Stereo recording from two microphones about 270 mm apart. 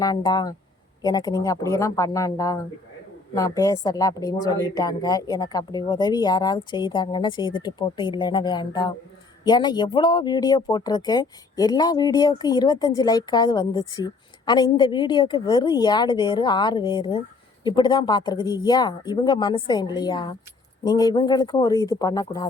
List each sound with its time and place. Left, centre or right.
0.0 s speech: centre